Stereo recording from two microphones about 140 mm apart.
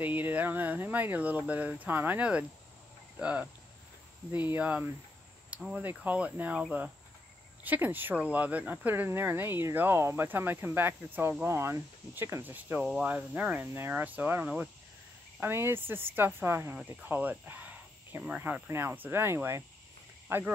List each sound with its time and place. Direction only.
0.0 s speech: 10° right (ahead or behind)